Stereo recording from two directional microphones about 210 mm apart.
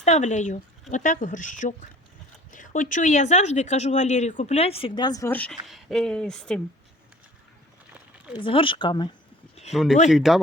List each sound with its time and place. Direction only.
0.0 s speech: 35° left (ahead or behind); by 6.6 s 5° left (ahead or behind)
8.4 s speech: 25° left (ahead or behind)
9.7 s speech: centre (ahead or behind)